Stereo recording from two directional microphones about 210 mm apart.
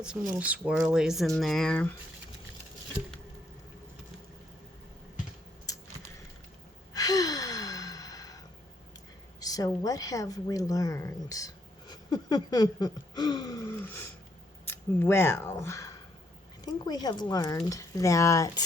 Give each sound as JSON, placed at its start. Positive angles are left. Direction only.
{"t": 0.0, "sound": "speech", "side_deg": -5}
{"t": 6.9, "sound": "sigh", "side_deg": 15}
{"t": 9.4, "sound": "a woman's voice", "side_deg": 15}